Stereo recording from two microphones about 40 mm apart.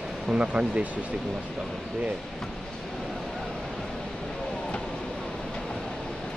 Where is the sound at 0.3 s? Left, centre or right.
Right.